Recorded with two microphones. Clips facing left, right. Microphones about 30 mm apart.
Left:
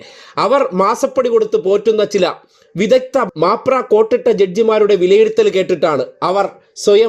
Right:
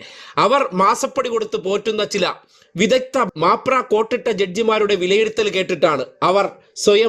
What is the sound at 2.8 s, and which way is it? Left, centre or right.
Speech, right.